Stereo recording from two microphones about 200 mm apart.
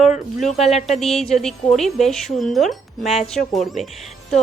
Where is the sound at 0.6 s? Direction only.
35° left (ahead or behind).